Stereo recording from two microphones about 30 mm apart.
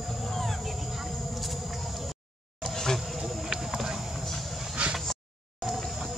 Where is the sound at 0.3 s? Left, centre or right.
Centre.